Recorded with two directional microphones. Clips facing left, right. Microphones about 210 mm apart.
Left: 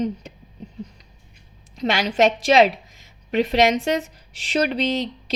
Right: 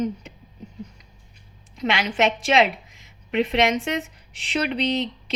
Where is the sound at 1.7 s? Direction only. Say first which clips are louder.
Left 2 dB; 40° left (ahead or behind).